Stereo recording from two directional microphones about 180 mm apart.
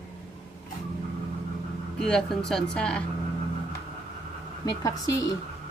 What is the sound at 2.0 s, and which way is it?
Speech, 5° left (ahead or behind).